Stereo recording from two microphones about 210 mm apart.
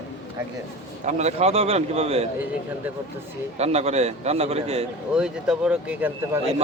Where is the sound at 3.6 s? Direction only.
30° right (ahead or behind).